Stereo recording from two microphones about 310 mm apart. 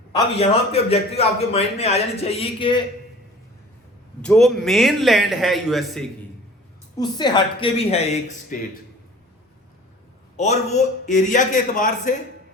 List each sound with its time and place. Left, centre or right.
0.1 s a man's voice: centre
4.2 s a man's voice: centre
6.9 s a man's voice: centre
10.3 s a man's voice: left